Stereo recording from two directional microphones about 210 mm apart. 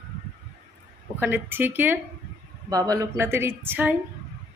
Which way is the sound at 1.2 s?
10° right (ahead or behind).